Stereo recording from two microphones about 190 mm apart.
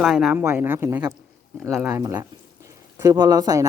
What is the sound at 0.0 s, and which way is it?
A woman's voice, 5° right (ahead or behind).